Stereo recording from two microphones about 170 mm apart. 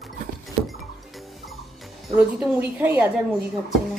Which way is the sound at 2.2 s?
10° right (ahead or behind).